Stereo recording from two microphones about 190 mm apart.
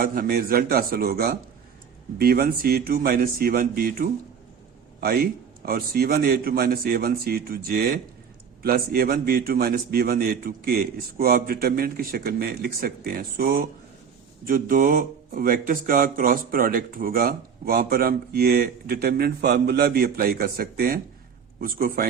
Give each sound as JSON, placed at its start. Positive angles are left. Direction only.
{"t": 0.0, "sound": "speech", "side_deg": -50}